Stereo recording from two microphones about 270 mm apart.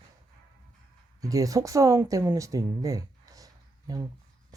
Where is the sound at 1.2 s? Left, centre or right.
Centre.